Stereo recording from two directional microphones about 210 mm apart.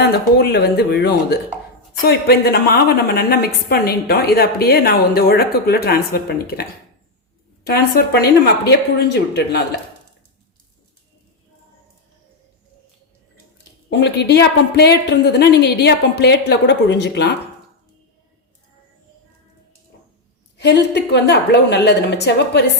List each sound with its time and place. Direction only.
0.0 s a woman's voice: 50° left (ahead or behind)
7.7 s a woman's voice: 50° left (ahead or behind)
13.9 s a woman's voice: 55° left (ahead or behind)
20.6 s a woman's voice: 55° left (ahead or behind)